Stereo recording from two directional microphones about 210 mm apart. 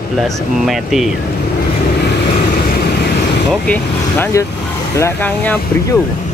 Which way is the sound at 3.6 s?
10° left (ahead or behind).